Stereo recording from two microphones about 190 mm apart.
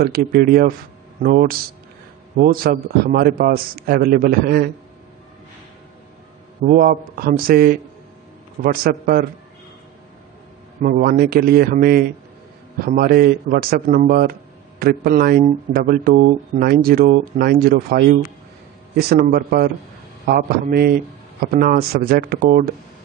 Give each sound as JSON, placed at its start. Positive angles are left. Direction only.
{"t": 0.0, "sound": "speech", "side_deg": -55}
{"t": 6.6, "sound": "speech", "side_deg": -45}
{"t": 10.8, "sound": "speech", "side_deg": -50}